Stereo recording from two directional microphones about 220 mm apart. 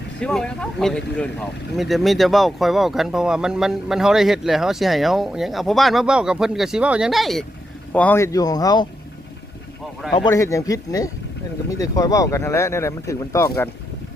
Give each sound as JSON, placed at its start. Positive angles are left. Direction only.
{"t": 0.2, "sound": "speech", "side_deg": 5}
{"t": 10.2, "sound": "speech", "side_deg": 15}